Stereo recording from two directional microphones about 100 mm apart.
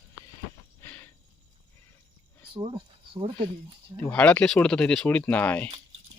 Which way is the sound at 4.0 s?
15° left (ahead or behind).